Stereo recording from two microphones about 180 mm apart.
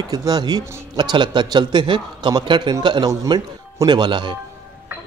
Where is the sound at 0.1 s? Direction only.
20° right (ahead or behind).